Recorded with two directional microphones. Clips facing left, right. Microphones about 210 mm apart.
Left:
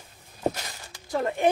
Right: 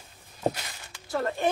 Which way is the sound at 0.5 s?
40° left (ahead or behind).